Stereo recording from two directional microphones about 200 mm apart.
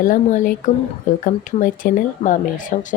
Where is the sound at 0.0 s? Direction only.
40° left (ahead or behind).